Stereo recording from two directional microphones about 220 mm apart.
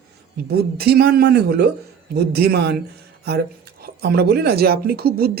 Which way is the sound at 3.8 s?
45° right (ahead or behind).